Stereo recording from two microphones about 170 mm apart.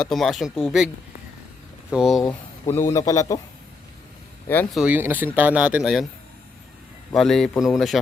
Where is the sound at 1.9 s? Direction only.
5° right (ahead or behind).